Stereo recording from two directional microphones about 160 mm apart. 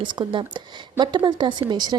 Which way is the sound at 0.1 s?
30° right (ahead or behind).